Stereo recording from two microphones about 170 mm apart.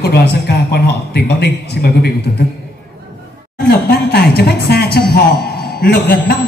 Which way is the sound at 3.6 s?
65° left (ahead or behind).